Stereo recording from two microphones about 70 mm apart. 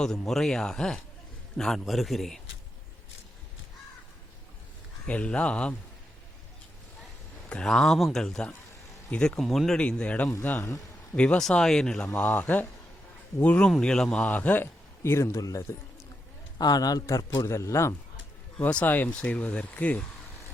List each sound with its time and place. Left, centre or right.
0.0 s a man's voice: centre
5.0 s speech: centre
7.5 s a man's voice: centre
9.4 s a man's voice: centre
9.7 s speech: centre
10.6 s a man's voice: left
11.1 s speech: centre
12.4 s speech: left
13.7 s speech: centre
14.3 s speech: left
15.0 s a man's voice: left
16.6 s a man's voice: left
18.6 s speech: left